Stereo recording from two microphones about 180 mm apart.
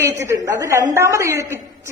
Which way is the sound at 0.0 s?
15° right (ahead or behind).